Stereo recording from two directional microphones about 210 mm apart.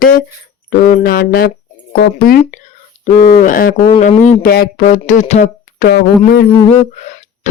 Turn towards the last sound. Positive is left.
turn(degrees=35)  # may be behind; listen again after turning